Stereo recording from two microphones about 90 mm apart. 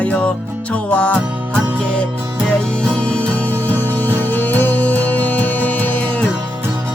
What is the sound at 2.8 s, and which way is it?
Music, 10° left (ahead or behind).